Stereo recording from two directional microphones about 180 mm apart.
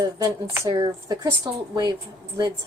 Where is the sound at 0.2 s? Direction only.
20° right (ahead or behind).